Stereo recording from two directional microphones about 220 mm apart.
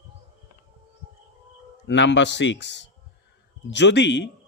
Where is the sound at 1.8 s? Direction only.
55° left (ahead or behind).